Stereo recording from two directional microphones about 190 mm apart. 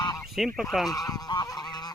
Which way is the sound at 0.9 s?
20° left (ahead or behind).